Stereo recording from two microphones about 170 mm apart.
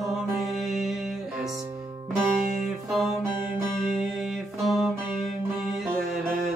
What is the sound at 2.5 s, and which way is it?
Music, centre (ahead or behind).